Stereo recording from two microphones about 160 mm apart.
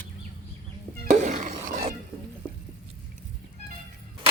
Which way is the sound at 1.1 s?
45° right (ahead or behind).